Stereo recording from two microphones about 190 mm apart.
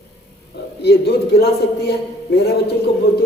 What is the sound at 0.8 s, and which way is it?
Speech, 60° left (ahead or behind).